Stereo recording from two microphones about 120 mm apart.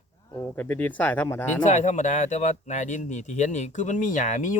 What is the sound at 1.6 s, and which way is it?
Speech, 75° left (ahead or behind).